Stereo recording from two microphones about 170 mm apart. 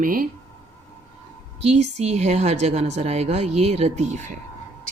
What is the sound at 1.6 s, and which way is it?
Speech, 40° right (ahead or behind).